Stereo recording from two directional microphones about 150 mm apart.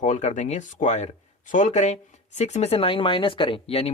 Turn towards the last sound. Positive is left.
turn(degrees=40)  # may be behind; listen again after turning